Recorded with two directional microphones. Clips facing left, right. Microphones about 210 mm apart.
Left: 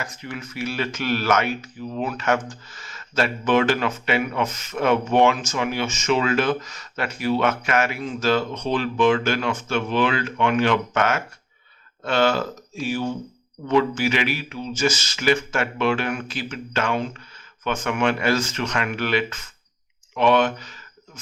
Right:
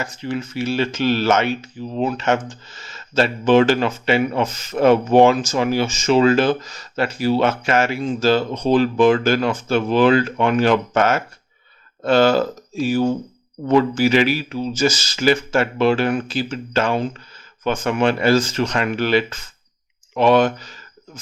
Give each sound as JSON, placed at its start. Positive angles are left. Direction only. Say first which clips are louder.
{"t": 0.0, "sound": "speech", "louder": "right 7 dB", "side_deg": -30}